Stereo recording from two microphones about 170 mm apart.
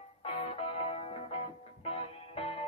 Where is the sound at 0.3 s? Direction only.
35° left (ahead or behind).